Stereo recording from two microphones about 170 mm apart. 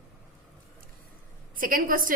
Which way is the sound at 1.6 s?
55° right (ahead or behind).